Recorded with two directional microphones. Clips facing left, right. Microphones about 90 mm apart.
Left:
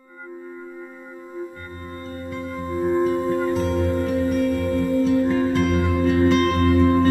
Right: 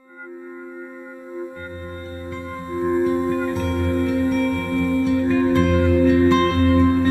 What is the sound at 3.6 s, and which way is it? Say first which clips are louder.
Music: left 1 dB; 25° left (ahead or behind).